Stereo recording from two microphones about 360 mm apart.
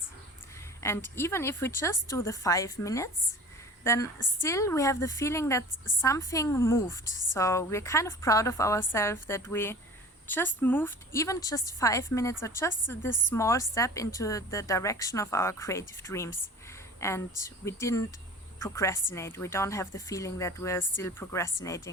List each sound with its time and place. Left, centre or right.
0.8 s a woman's voice: centre